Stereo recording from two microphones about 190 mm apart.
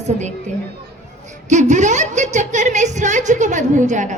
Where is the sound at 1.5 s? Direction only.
40° right (ahead or behind).